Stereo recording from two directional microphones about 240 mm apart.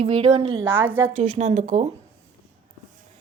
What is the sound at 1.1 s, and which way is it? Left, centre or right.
Speech, right.